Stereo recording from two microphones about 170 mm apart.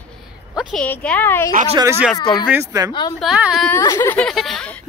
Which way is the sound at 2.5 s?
20° right (ahead or behind).